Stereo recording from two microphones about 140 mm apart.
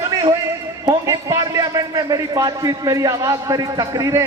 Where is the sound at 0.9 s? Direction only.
25° right (ahead or behind).